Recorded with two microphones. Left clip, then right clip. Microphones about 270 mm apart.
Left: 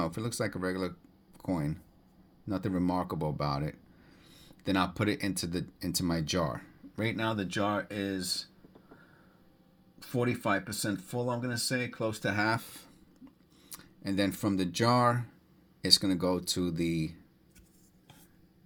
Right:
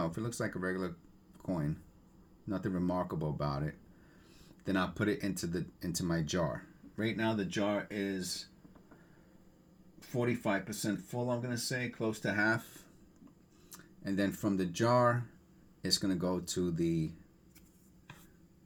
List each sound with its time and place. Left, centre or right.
0.0 s speech: left
10.0 s speech: left